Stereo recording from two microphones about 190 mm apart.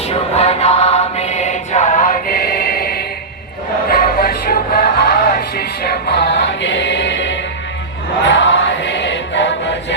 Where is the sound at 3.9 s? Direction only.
50° left (ahead or behind).